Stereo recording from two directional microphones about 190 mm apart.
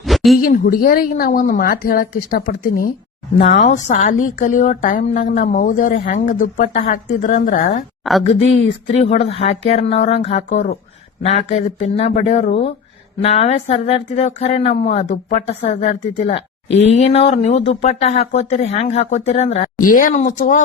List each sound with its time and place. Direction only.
0.0 s a sound: centre (ahead or behind)
0.3 s a woman's voice: 50° left (ahead or behind)
19.8 s a woman's voice: 45° left (ahead or behind)